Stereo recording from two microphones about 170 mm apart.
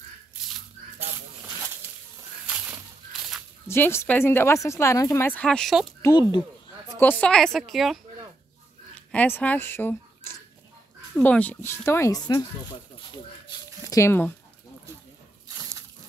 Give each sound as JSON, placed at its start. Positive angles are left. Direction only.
{"t": 2.4, "sound": "crushing", "side_deg": -5}
{"t": 3.6, "sound": "speech", "side_deg": 15}
{"t": 6.0, "sound": "speech", "side_deg": 25}
{"t": 7.0, "sound": "a woman's voice", "side_deg": 10}
{"t": 13.8, "sound": "speech", "side_deg": 15}